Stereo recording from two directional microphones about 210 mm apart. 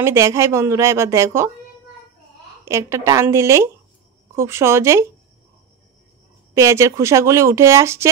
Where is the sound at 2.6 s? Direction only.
15° right (ahead or behind).